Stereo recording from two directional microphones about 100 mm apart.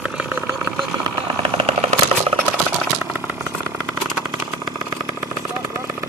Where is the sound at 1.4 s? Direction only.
80° right.